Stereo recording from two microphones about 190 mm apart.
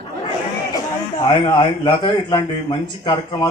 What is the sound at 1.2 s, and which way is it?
Speech, 20° left (ahead or behind).